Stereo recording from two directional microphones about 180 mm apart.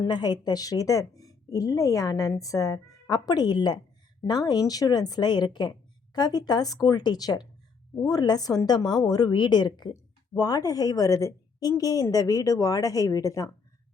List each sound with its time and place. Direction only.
0.0 s a woman's voice: 20° left (ahead or behind)